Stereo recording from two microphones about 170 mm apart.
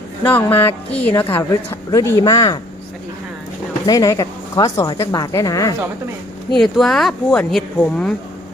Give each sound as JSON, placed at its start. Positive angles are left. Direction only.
{"t": 0.2, "sound": "a woman's voice", "side_deg": 10}
{"t": 0.7, "sound": "speech", "side_deg": 35}
{"t": 1.0, "sound": "a woman's voice", "side_deg": 15}
{"t": 3.8, "sound": "speech", "side_deg": 20}
{"t": 6.5, "sound": "speech", "side_deg": 0}